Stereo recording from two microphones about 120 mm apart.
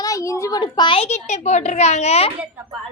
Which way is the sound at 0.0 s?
30° left (ahead or behind).